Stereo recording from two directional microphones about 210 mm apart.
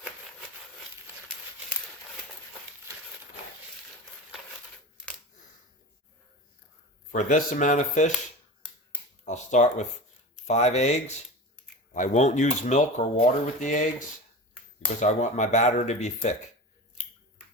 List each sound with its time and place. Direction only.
7.1 s speech: 35° left (ahead or behind)
9.2 s speech: 35° left (ahead or behind)
11.9 s speech: 35° left (ahead or behind)
15.0 s speech: 35° left (ahead or behind)